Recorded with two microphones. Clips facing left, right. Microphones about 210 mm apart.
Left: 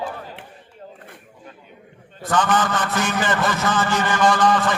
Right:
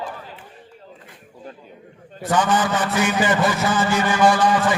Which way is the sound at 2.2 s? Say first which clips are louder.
Right 1 dB; 10° right (ahead or behind).